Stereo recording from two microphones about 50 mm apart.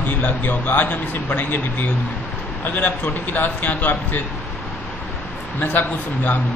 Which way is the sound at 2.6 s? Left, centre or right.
Left.